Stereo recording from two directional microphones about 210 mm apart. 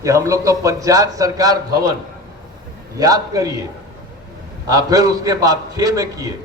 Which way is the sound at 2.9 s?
15° right (ahead or behind).